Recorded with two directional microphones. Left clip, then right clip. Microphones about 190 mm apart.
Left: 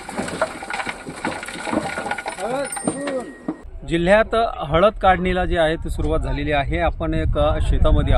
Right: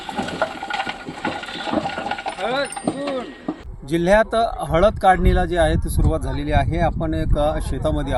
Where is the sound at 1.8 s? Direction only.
30° left (ahead or behind).